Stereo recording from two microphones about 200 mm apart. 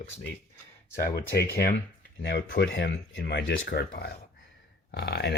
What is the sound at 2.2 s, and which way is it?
Speech, 60° left (ahead or behind).